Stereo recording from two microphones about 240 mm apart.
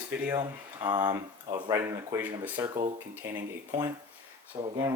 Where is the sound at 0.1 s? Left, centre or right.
Centre.